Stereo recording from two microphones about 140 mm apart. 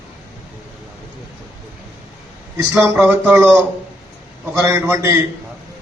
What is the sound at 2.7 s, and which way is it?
Speech, 10° right (ahead or behind).